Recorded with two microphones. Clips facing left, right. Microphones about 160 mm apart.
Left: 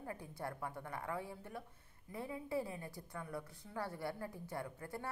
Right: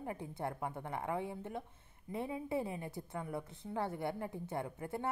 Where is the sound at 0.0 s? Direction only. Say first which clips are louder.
Right 5 dB; 20° right (ahead or behind).